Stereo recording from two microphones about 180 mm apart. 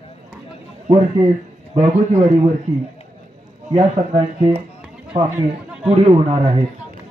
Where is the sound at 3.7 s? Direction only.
30° right (ahead or behind).